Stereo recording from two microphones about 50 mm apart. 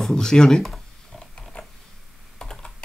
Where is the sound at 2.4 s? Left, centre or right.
Centre.